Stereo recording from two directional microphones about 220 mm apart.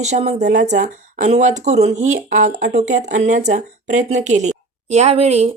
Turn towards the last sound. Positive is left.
turn(degrees=-30)  # may be behind; listen again after turning